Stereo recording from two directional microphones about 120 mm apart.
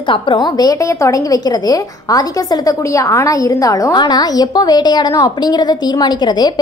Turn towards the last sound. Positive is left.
turn(degrees=35)  # may be behind; listen again after turning